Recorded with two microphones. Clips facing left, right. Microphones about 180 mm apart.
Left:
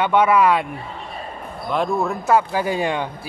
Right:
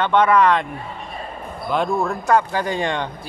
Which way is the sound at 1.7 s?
Centre (ahead or behind).